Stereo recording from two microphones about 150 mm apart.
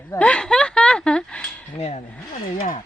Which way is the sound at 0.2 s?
5° left (ahead or behind).